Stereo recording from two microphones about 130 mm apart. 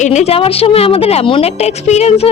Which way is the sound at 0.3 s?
50° left (ahead or behind).